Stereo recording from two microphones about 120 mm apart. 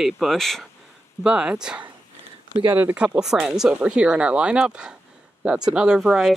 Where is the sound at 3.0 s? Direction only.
5° right (ahead or behind).